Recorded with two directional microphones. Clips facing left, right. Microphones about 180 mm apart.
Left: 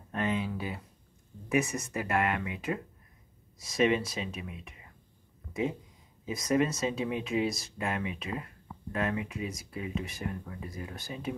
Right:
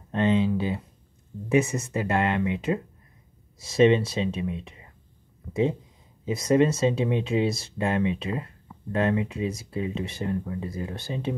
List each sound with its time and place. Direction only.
0.1 s speech: 25° right (ahead or behind)